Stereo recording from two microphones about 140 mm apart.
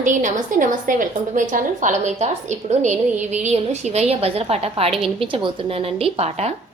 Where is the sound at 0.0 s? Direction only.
65° right (ahead or behind); by 6.5 s 50° right (ahead or behind).